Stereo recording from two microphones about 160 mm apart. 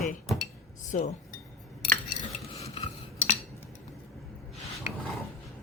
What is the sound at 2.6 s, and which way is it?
Cutlery, 40° left (ahead or behind).